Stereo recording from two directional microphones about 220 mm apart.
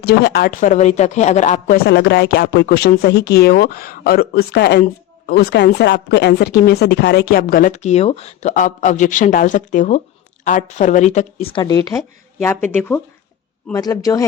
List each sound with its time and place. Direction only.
0.0 s speech: 45° left (ahead or behind); by 14.3 s 15° left (ahead or behind)